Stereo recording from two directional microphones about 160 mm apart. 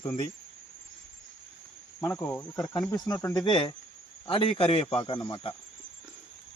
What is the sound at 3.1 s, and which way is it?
Speech, 20° left (ahead or behind).